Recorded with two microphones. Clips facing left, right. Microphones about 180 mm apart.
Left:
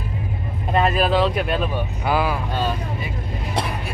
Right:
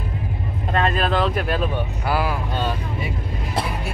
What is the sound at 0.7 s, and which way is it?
Speech, 5° left (ahead or behind).